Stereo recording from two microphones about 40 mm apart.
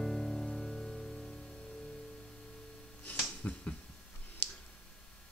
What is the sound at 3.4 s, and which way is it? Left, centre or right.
Finger snapping, left.